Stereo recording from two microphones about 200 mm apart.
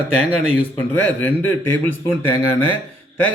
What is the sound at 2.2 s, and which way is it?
Speech, 25° right (ahead or behind).